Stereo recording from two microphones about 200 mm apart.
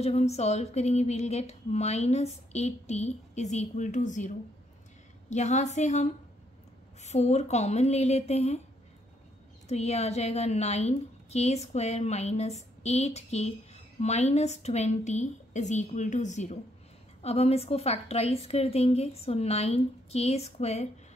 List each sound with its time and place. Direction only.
0.0 s speech: 30° left (ahead or behind)
9.7 s speech: 30° left (ahead or behind)